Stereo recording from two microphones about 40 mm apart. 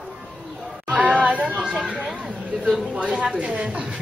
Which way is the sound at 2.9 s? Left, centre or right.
Right.